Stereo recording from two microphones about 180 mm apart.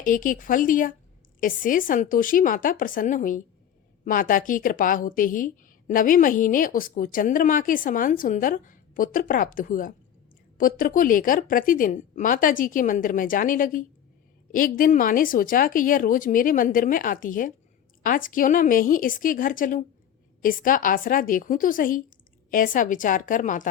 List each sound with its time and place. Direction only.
0.0 s a woman's voice: 50° left (ahead or behind)